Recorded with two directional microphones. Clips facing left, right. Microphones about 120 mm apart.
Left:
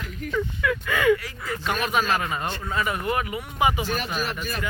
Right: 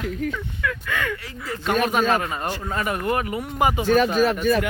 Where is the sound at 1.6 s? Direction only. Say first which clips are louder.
Right 6 dB; 50° right (ahead or behind).